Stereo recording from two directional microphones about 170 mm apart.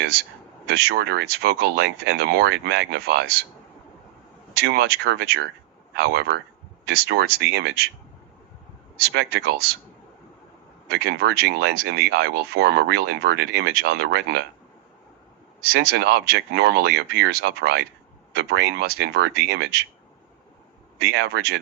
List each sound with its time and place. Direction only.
0.7 s speech: 70° right (ahead or behind)
4.6 s speech: 75° right (ahead or behind)
9.1 s speech: 70° right (ahead or behind)
10.9 s speech: 70° right (ahead or behind)
15.7 s speech: 70° right (ahead or behind)
21.0 s speech: 70° right (ahead or behind)